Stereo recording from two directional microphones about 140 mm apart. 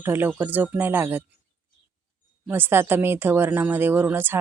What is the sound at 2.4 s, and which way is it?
Speech, 15° right (ahead or behind).